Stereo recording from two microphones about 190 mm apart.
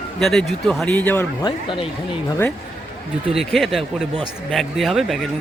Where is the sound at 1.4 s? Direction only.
25° left (ahead or behind).